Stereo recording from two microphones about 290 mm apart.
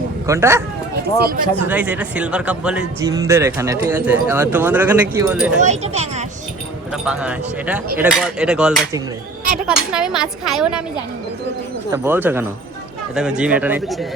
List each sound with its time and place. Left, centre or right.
0.3 s speech: centre
1.6 s speech: centre
5.5 s speech: right
6.9 s speech: centre
11.9 s speech: centre